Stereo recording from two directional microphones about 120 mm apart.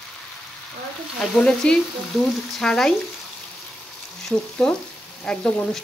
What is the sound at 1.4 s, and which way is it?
Frying, 5° left (ahead or behind).